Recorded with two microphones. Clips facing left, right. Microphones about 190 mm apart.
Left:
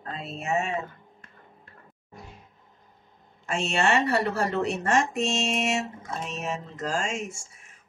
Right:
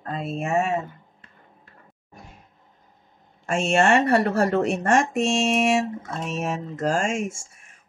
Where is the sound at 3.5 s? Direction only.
50° right (ahead or behind).